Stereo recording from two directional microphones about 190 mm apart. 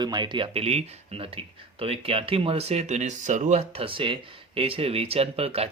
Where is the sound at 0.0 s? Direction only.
20° right (ahead or behind).